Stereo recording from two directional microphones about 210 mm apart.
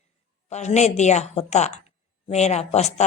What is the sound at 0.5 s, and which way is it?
Speech, 35° left (ahead or behind).